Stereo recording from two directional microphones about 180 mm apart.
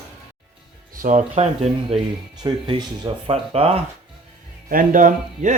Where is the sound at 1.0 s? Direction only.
40° right (ahead or behind).